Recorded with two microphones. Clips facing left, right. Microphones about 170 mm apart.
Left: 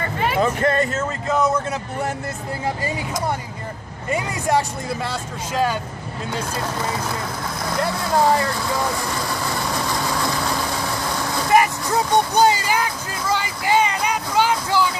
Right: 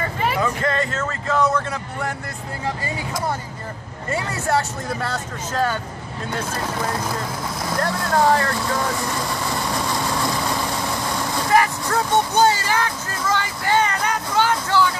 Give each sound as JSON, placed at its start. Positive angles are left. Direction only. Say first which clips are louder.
{"t": 0.0, "sound": "vehicle", "louder": "even", "side_deg": 0}
{"t": 0.4, "sound": "speech", "louder": "left 6 dB", "side_deg": 20}
{"t": 4.1, "sound": "speech", "louder": "left 1 dB", "side_deg": 15}
{"t": 7.7, "sound": "speech", "louder": "even", "side_deg": 5}
{"t": 9.3, "sound": "vehicle", "louder": "even", "side_deg": 0}
{"t": 11.5, "sound": "music", "louder": "left 2 dB", "side_deg": 15}